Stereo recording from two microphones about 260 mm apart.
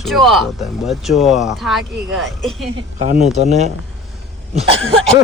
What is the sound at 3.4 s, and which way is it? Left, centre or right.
Speech, right.